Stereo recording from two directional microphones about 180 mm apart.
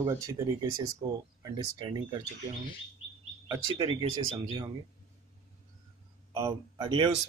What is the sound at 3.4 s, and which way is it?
Speech, 25° right (ahead or behind).